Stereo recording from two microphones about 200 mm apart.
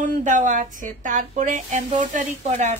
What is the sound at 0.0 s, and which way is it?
Speech, 40° right (ahead or behind).